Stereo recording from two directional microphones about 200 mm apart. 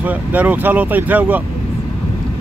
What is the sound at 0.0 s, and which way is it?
Speech, 5° right (ahead or behind).